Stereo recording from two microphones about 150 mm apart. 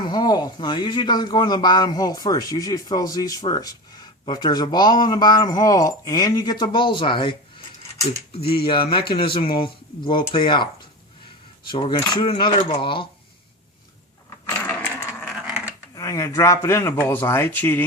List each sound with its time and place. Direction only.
0.1 s a man's voice: 30° left (ahead or behind)
8.6 s speech: 35° left (ahead or behind)
11.7 s speech: 30° left (ahead or behind)
14.6 s dog: 10° left (ahead or behind)
15.3 s dog: 5° right (ahead or behind)
16.0 s a man's voice: 20° left (ahead or behind)